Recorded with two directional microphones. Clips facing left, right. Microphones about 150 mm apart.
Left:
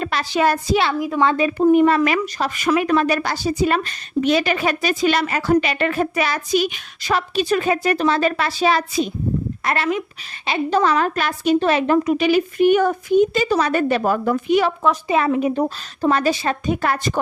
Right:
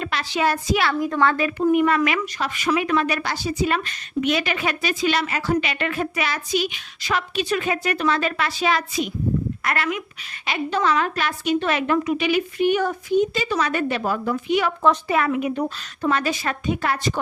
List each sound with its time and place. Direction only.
0.0 s speech: 40° left (ahead or behind)
0.7 s speech: 25° left (ahead or behind)
0.9 s a woman's voice: 5° left (ahead or behind)
1.2 s speech: 20° left (ahead or behind)
1.5 s a woman's voice: 30° left (ahead or behind); by 14.6 s 50° left (ahead or behind)
15.0 s a woman's voice: 25° left (ahead or behind)
16.6 s a woman's voice: 45° left (ahead or behind)